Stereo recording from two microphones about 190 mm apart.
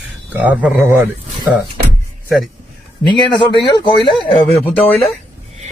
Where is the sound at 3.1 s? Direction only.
25° left (ahead or behind).